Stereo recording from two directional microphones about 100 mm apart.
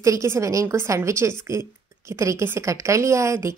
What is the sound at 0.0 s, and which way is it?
A woman's voice, 30° right (ahead or behind).